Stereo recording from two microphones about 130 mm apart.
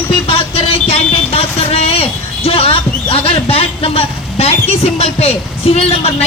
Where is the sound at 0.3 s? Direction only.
45° left (ahead or behind).